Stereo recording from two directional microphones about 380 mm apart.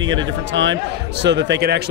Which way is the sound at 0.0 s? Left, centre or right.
Right.